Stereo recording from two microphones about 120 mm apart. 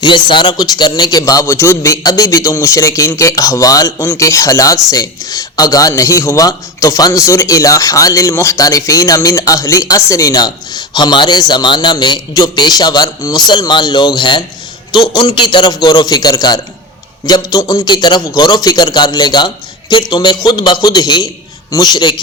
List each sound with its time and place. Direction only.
0.0 s a man's voice: 40° left (ahead or behind)